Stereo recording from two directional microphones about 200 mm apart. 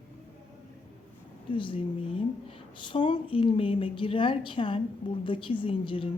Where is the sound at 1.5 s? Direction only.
25° left (ahead or behind).